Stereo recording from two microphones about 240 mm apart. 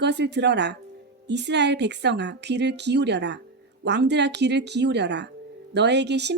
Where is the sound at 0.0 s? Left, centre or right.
Right.